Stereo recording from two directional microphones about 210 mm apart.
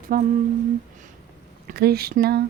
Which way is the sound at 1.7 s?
50° right (ahead or behind).